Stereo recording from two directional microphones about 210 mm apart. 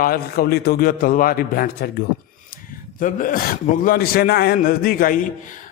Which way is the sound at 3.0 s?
40° left (ahead or behind).